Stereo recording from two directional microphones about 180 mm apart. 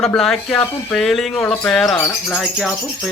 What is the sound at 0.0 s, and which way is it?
Speech, centre (ahead or behind).